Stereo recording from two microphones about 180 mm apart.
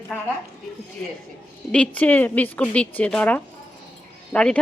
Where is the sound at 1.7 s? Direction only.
5° left (ahead or behind).